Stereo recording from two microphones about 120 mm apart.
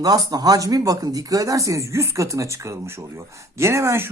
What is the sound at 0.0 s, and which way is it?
Speech, 30° right (ahead or behind).